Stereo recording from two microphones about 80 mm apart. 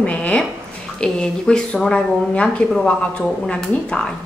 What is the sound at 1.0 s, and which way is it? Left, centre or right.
Speech, centre.